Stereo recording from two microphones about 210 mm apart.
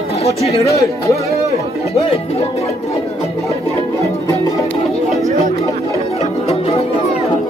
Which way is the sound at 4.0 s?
15° left (ahead or behind).